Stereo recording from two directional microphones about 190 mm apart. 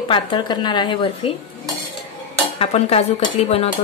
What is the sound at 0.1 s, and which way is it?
Speech, 25° left (ahead or behind).